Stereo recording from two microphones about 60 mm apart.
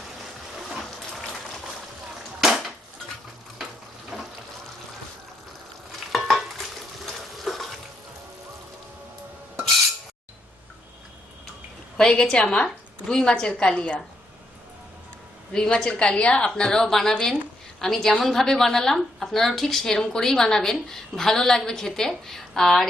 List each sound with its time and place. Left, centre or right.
0.6 s a sound: centre
2.4 s dishes: centre
4.1 s water: centre
6.1 s stir: centre
11.9 s a woman's voice: centre
15.5 s a woman's voice: centre